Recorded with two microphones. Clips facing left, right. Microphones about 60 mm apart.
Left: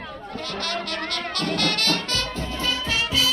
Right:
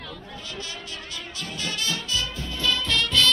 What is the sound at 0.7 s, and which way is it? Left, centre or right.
Speech, left.